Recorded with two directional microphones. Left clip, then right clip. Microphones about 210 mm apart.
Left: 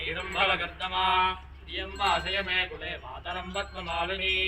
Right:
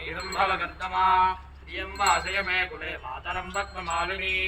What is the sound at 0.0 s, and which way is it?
Music, 20° left (ahead or behind).